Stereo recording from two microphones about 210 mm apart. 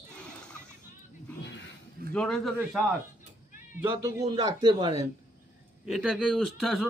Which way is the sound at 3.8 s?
15° right (ahead or behind).